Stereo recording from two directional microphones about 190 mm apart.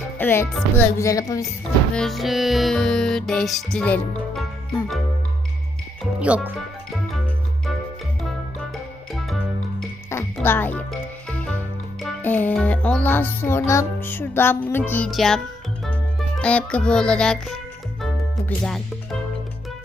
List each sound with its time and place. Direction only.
0.2 s speech: 10° left (ahead or behind)
2.0 s music: centre (ahead or behind)
6.1 s speech: 5° right (ahead or behind)
9.1 s music: centre (ahead or behind)
10.3 s music: 10° left (ahead or behind)
11.3 s speech: 5° left (ahead or behind)
16.4 s music: 5° left (ahead or behind)